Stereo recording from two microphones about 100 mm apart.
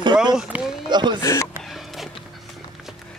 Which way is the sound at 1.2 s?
35° left (ahead or behind).